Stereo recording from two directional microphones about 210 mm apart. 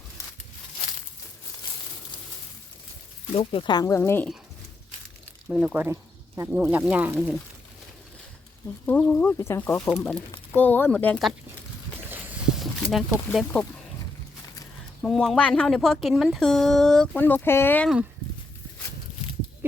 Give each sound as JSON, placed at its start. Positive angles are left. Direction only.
{"t": 3.3, "sound": "speech", "side_deg": 25}
{"t": 5.5, "sound": "speech", "side_deg": -5}
{"t": 8.9, "sound": "speech", "side_deg": 5}
{"t": 12.1, "sound": "a sound", "side_deg": 0}
{"t": 15.0, "sound": "speech", "side_deg": 0}